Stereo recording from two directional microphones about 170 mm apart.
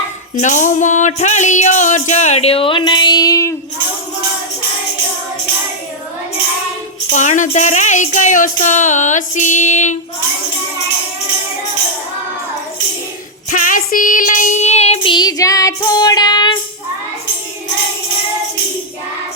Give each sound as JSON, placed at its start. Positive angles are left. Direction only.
{"t": 0.3, "sound": "music", "side_deg": 45}
{"t": 7.1, "sound": "music", "side_deg": 45}
{"t": 13.5, "sound": "child singing", "side_deg": 50}
{"t": 15.1, "sound": "child singing", "side_deg": 25}